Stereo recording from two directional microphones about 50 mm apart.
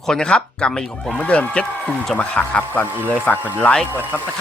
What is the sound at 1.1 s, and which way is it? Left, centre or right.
Speech, left.